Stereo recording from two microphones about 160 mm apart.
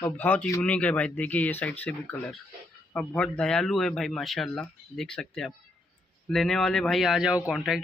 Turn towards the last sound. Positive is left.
turn(degrees=0)  # may be behind; listen again after turning